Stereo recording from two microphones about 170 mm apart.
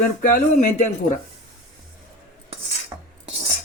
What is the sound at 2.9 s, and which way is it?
Filing, 20° right (ahead or behind).